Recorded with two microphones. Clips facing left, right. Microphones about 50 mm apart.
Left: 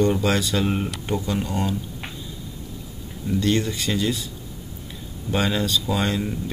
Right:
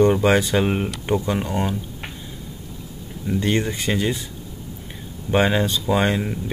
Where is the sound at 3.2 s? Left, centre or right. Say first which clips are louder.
Even; right.